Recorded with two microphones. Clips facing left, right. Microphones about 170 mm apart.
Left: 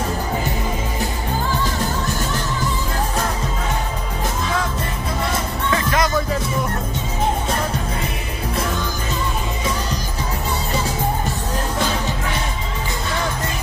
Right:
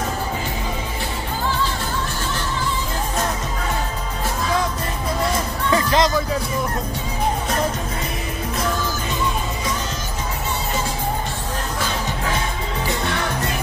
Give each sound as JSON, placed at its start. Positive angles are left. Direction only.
{"t": 5.7, "sound": "music", "side_deg": -25}